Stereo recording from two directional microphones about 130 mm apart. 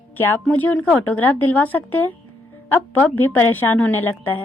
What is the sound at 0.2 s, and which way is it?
A woman's voice, 15° left (ahead or behind).